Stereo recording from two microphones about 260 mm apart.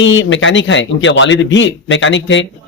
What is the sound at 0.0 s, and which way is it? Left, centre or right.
Speech, left.